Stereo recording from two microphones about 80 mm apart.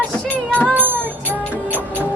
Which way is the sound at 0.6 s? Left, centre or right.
Right.